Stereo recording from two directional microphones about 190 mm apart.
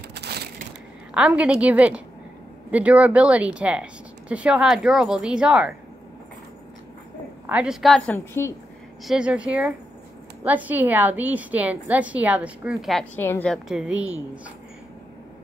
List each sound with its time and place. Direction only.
0.1 s crushing: 60° right (ahead or behind)
1.1 s a woman's voice: 5° right (ahead or behind)
7.4 s speech: 5° right (ahead or behind)
8.3 s speech: 15° left (ahead or behind)
9.0 s a woman's voice: 5° right (ahead or behind)
13.1 s speech: 10° left (ahead or behind); by 14.4 s 5° right (ahead or behind)